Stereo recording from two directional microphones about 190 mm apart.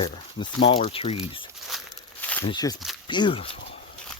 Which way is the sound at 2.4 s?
20° left (ahead or behind).